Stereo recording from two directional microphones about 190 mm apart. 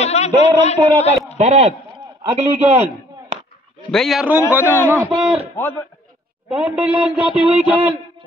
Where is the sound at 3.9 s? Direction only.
Centre (ahead or behind).